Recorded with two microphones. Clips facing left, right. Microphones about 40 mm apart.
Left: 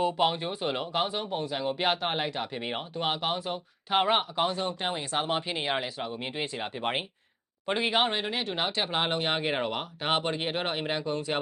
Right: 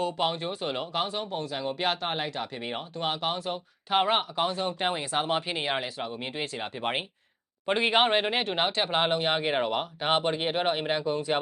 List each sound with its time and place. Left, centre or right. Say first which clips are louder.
0.0 s speech: left 2 dB; centre
7.7 s speech: right 3 dB; centre
8.1 s speech: right 5 dB; right
8.4 s speech: right 3 dB; centre